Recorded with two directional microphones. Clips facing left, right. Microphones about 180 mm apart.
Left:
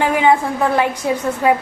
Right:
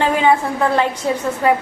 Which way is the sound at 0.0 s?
15° left (ahead or behind).